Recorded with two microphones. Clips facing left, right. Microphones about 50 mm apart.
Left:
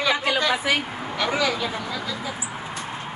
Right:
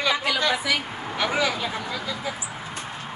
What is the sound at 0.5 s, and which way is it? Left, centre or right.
Speech, left.